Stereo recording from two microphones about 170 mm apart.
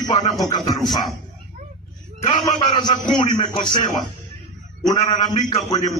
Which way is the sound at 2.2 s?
35° left (ahead or behind).